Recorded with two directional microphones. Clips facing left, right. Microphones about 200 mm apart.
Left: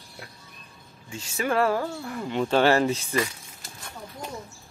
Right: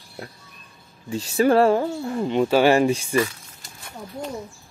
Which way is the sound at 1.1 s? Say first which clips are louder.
Right 8 dB; 35° right (ahead or behind).